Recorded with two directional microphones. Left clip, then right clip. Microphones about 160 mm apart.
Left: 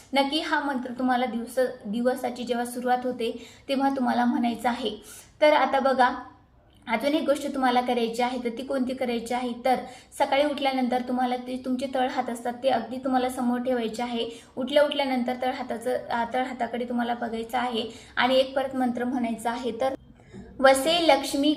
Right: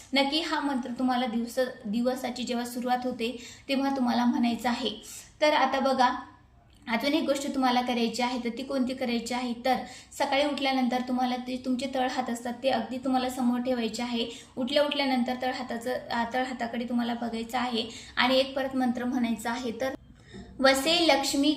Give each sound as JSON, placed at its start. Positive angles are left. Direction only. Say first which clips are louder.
{"t": 0.1, "sound": "a woman's voice", "louder": "left 2 dB", "side_deg": -15}
{"t": 19.4, "sound": "a woman's voice", "louder": "left 4 dB", "side_deg": -25}
{"t": 20.6, "sound": "a woman's voice", "louder": "left 3 dB", "side_deg": -10}